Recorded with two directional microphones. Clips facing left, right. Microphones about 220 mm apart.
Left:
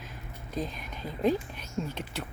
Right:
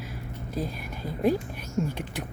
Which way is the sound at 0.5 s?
10° right (ahead or behind).